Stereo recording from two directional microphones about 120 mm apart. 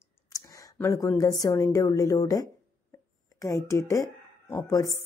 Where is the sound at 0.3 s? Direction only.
25° left (ahead or behind).